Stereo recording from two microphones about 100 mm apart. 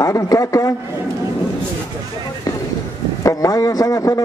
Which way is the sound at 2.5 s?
35° left (ahead or behind).